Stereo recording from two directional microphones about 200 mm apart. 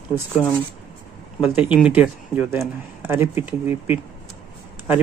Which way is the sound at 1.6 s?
5° right (ahead or behind).